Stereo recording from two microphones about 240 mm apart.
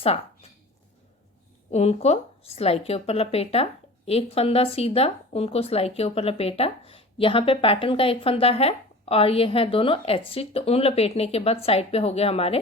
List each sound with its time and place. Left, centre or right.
1.7 s a woman's voice: left